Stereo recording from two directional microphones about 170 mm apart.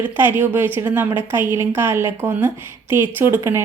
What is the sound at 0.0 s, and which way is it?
Speech, 10° right (ahead or behind).